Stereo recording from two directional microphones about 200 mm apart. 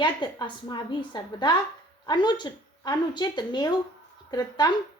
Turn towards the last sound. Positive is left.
turn(degrees=20)  # may be behind; listen again after turning